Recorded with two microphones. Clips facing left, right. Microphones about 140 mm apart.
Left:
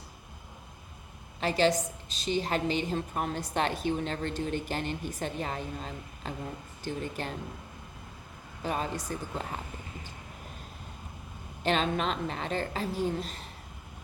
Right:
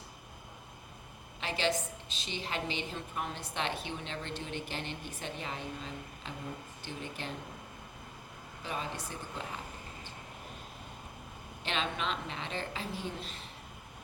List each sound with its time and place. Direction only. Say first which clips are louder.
1.4 s a woman's voice: left 7 dB; 40° left (ahead or behind)
8.6 s a woman's voice: left 6 dB; 45° left (ahead or behind)
11.6 s a woman's voice: left 7 dB; 40° left (ahead or behind)